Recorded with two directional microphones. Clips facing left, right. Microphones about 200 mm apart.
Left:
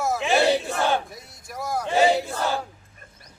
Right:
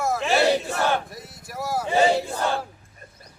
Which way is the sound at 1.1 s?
5° right (ahead or behind).